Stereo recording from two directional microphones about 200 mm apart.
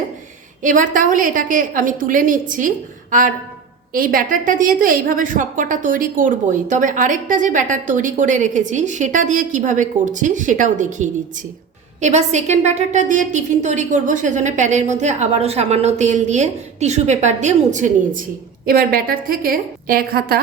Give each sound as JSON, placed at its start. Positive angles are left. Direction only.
{"t": 0.6, "sound": "a woman's voice", "side_deg": -40}